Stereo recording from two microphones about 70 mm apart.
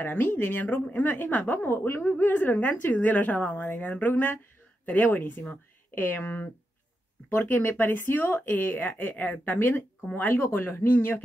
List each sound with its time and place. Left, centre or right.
0.0 s a woman's voice: left